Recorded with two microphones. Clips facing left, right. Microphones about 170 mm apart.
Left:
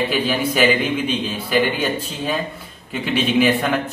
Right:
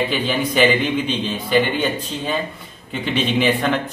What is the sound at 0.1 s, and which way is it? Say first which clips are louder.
A man's voice: even; 5° left (ahead or behind).